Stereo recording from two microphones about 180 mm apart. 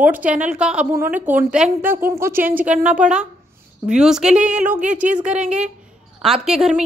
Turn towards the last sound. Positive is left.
turn(degrees=-5)  # may be behind; listen again after turning